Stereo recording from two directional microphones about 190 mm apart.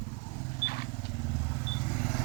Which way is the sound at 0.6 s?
55° left (ahead or behind).